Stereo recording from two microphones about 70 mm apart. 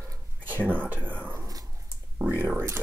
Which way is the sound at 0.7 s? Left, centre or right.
Right.